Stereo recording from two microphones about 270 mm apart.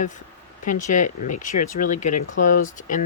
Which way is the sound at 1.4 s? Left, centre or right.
Left.